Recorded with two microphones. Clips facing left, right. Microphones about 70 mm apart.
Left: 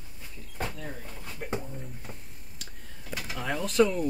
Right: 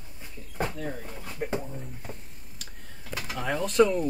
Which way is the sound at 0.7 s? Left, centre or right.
Centre.